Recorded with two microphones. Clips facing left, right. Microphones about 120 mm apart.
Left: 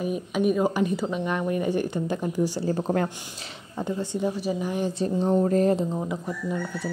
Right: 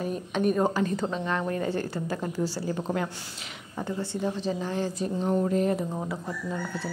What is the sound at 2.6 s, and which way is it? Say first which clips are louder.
Speech: left 4 dB; 40° left (ahead or behind).